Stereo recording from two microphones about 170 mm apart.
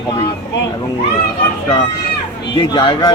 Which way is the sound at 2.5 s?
25° left (ahead or behind).